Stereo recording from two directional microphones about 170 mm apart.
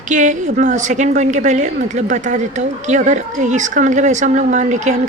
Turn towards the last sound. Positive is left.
turn(degrees=-45)  # may be behind; listen again after turning